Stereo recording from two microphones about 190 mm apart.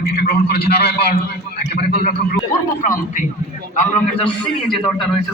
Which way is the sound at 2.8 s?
40° left (ahead or behind).